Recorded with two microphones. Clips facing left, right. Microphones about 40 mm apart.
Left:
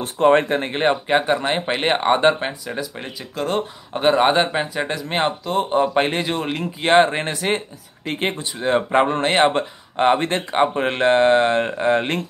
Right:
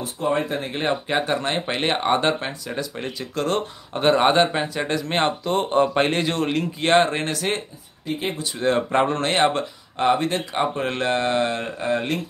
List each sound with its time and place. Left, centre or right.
0.0 s speech: left
0.7 s speech: left
2.7 s speech: centre; by 7.6 s left
8.0 s speech: left
8.5 s speech: centre; by 12.2 s left